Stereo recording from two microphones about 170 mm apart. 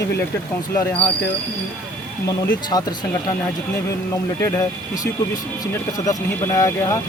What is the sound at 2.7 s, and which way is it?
Speech, 20° left (ahead or behind).